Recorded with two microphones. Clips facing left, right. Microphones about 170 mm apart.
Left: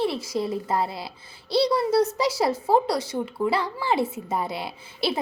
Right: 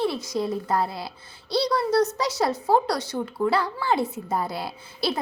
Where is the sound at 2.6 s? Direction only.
Centre (ahead or behind).